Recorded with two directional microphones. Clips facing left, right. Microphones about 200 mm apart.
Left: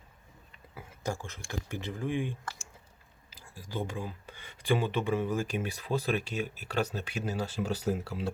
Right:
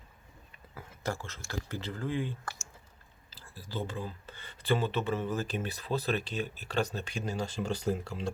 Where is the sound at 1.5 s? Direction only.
15° left (ahead or behind).